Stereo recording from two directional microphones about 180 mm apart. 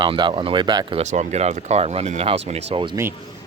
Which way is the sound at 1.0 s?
40° right (ahead or behind).